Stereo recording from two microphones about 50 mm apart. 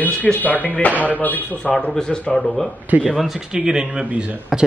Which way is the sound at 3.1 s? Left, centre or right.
Centre.